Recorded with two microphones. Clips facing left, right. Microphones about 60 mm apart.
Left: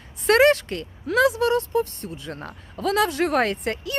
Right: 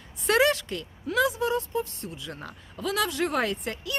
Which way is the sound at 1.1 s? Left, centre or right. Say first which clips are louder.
Left 6 dB; left.